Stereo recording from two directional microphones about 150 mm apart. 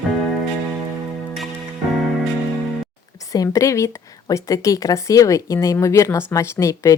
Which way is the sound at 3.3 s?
20° left (ahead or behind).